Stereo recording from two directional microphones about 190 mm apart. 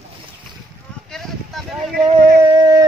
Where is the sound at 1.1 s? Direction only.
Centre (ahead or behind).